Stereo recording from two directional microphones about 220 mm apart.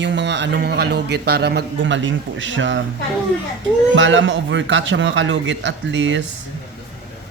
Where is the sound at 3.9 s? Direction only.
55° right (ahead or behind).